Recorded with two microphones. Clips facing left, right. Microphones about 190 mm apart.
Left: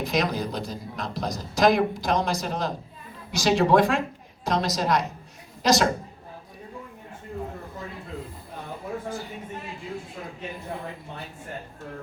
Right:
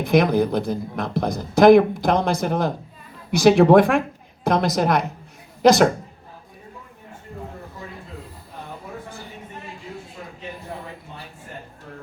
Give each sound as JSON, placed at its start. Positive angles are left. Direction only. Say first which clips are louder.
{"t": 0.0, "sound": "a woman's voice", "louder": "right 8 dB", "side_deg": -55}